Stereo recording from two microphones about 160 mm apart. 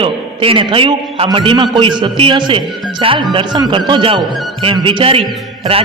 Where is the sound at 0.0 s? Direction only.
35° right (ahead or behind).